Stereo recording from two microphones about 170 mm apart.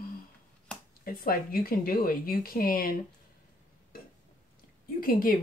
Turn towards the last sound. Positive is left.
turn(degrees=55)  # may be behind; listen again after turning